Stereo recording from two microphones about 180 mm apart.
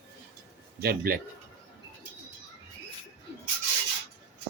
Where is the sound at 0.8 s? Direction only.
55° right (ahead or behind).